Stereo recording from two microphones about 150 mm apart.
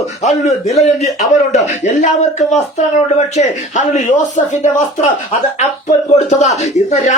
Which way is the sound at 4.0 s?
55° left (ahead or behind).